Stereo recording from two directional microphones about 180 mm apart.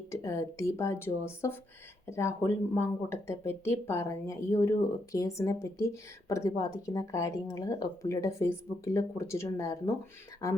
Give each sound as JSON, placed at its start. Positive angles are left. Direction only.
{"t": 0.1, "sound": "speech", "side_deg": 15}